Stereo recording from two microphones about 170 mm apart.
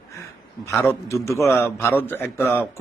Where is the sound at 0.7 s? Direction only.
15° left (ahead or behind).